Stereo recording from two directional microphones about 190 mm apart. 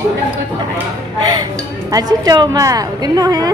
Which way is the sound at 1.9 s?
20° right (ahead or behind).